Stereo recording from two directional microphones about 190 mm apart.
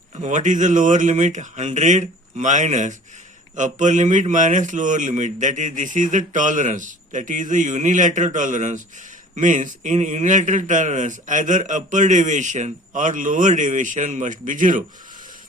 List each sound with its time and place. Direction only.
0.2 s a man's voice: 40° right (ahead or behind)